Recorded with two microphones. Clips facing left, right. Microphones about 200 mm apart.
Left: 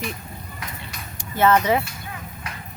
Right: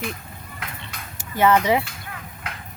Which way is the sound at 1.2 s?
10° right (ahead or behind).